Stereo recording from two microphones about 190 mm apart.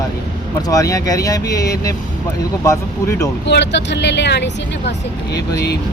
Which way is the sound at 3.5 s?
65° left (ahead or behind).